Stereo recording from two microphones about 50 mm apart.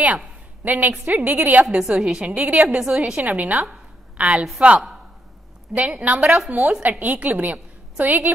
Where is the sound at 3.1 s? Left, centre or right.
Right.